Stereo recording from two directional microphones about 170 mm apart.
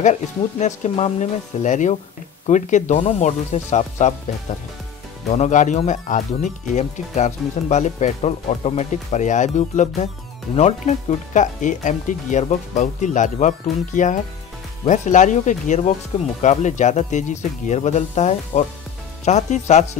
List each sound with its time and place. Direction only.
0.0 s speech: 45° left (ahead or behind)
5.3 s speech: 45° left (ahead or behind)